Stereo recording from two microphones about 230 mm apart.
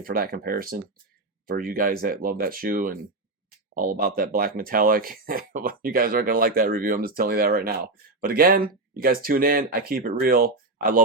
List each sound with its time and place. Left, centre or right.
0.0 s speech: right